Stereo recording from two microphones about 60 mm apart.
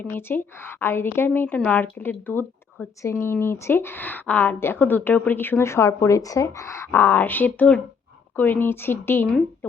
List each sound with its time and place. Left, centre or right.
0.2 s speech: left
1.3 s speech: left
1.8 s speech: left
3.1 s speech: left
5.6 s speech: left
6.9 s speech: left